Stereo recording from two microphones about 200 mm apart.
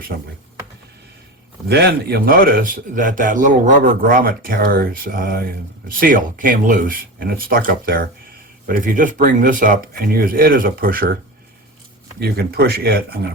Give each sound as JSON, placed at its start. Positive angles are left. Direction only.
{"t": 1.6, "sound": "a man's voice", "side_deg": -50}
{"t": 12.2, "sound": "a man's voice", "side_deg": -50}